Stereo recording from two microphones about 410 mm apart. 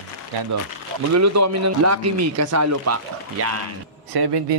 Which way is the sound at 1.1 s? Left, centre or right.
Right.